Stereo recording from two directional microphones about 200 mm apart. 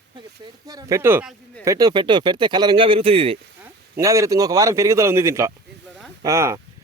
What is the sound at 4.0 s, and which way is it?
Speech, 15° right (ahead or behind).